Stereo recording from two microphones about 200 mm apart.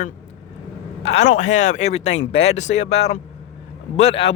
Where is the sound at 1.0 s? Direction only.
35° left (ahead or behind).